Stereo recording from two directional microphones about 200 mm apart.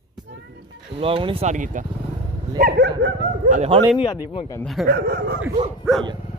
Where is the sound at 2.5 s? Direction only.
50° right (ahead or behind).